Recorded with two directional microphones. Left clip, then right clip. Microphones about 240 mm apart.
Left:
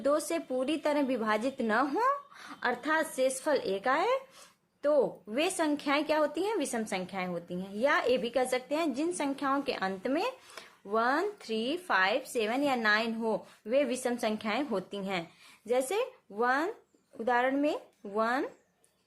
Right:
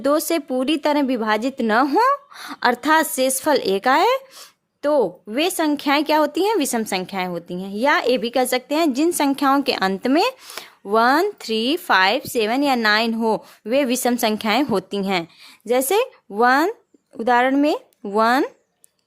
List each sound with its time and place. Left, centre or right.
0.0 s a woman's voice: right